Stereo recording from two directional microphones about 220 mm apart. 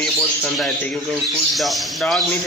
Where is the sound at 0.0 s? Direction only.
Centre (ahead or behind).